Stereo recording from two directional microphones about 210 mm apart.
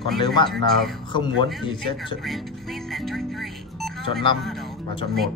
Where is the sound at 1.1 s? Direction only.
20° left (ahead or behind).